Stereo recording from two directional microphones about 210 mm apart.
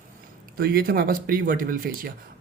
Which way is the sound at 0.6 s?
45° right (ahead or behind).